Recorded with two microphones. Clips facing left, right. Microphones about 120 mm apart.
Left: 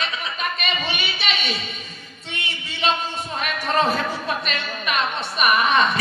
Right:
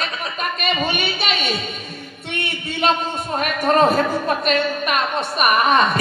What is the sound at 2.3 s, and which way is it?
A man's voice, 55° right (ahead or behind).